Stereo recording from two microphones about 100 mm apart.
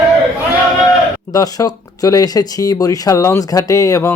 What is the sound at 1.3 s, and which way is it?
Speech, 40° left (ahead or behind).